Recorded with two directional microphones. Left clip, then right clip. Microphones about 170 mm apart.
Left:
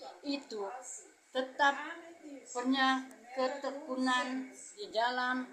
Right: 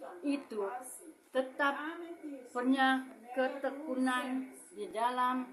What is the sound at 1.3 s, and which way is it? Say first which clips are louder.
Speech: left 2 dB; 5° right (ahead or behind).